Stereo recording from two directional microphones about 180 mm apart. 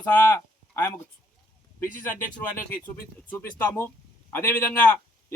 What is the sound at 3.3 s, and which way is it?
A man's voice, 15° left (ahead or behind).